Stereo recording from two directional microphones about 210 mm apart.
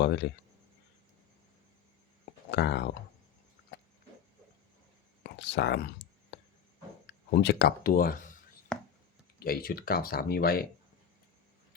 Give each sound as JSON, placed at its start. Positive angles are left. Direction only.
{"t": 0.0, "sound": "speech", "side_deg": 55}
{"t": 2.5, "sound": "speech", "side_deg": 55}
{"t": 5.2, "sound": "speech", "side_deg": 55}
{"t": 7.1, "sound": "speech", "side_deg": 50}
{"t": 8.7, "sound": "a sound", "side_deg": 5}
{"t": 9.4, "sound": "speech", "side_deg": 45}